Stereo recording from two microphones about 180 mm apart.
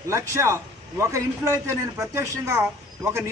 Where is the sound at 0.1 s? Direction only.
15° right (ahead or behind).